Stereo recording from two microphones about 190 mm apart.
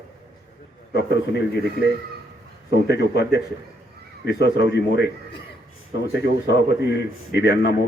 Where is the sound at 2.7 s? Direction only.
60° left (ahead or behind).